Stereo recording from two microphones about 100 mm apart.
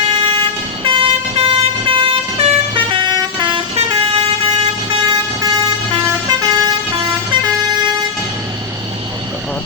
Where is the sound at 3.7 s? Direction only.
65° right (ahead or behind).